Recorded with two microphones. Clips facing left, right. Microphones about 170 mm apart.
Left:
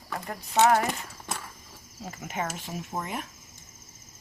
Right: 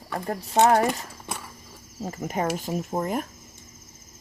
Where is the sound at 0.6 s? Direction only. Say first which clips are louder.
Right 3 dB; 40° right (ahead or behind).